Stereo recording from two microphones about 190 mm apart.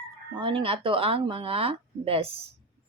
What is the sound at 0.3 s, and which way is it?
Speech, 30° right (ahead or behind).